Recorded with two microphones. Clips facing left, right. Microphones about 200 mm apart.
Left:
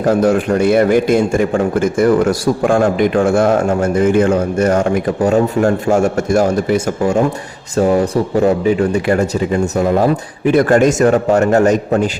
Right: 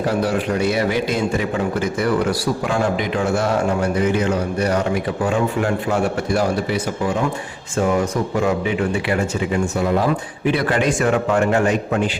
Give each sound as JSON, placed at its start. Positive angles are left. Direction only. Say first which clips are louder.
{"t": 0.0, "sound": "a man's voice", "louder": "left 7 dB", "side_deg": 45}
{"t": 7.8, "sound": "a man's voice", "louder": "left 6 dB", "side_deg": 35}